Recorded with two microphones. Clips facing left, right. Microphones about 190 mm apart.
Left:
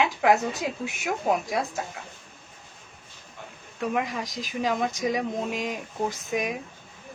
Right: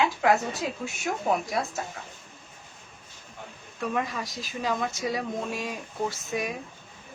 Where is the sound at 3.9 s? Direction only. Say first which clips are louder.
Left 1 dB; 15° left (ahead or behind).